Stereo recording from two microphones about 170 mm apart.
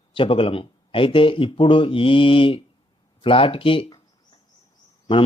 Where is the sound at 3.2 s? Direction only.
30° left (ahead or behind).